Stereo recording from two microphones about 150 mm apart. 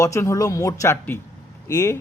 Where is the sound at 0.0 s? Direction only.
20° left (ahead or behind).